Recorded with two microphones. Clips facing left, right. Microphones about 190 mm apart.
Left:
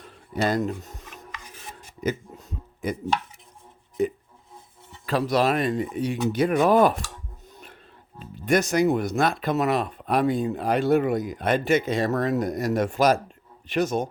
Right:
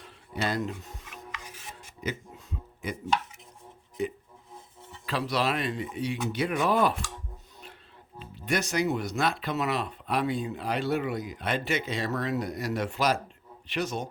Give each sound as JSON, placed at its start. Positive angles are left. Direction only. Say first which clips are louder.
{"t": 0.0, "sound": "dishes", "louder": "left 6 dB", "side_deg": 45}
{"t": 2.0, "sound": "a sound", "louder": "left 7 dB", "side_deg": 45}
{"t": 4.0, "sound": "speech", "louder": "left 7 dB", "side_deg": 45}
{"t": 8.2, "sound": "speech", "louder": "left 7 dB", "side_deg": 45}